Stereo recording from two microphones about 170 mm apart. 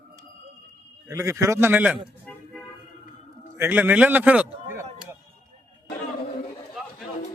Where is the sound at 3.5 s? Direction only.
10° right (ahead or behind).